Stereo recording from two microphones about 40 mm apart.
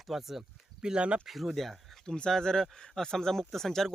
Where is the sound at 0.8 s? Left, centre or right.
Right.